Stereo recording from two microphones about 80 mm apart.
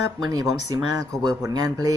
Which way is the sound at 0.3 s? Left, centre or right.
Right.